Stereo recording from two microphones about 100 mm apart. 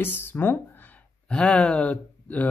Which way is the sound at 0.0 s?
20° left (ahead or behind).